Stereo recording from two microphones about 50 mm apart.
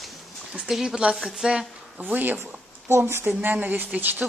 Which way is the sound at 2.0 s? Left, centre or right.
Right.